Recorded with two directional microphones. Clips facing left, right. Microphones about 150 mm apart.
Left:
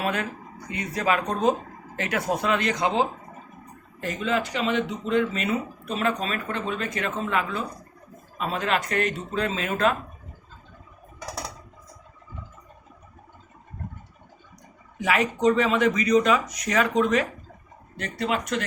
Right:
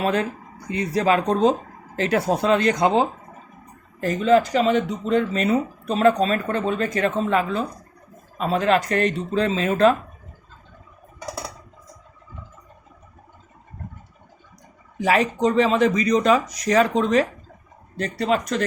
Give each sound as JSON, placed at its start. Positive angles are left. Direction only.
{"t": 0.0, "sound": "speech", "side_deg": -30}
{"t": 4.0, "sound": "speech", "side_deg": -40}
{"t": 15.0, "sound": "speech", "side_deg": -35}